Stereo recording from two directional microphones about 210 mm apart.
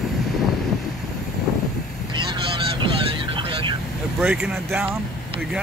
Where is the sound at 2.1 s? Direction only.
20° right (ahead or behind).